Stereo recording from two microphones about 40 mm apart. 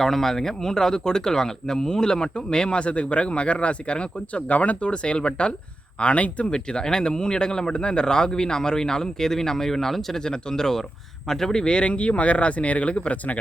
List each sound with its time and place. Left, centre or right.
0.0 s speech: centre; by 4.9 s left
4.9 s speech: left
6.5 s speech: centre
11.6 s speech: left